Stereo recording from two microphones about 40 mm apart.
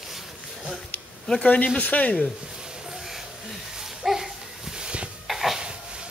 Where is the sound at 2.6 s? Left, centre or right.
Centre.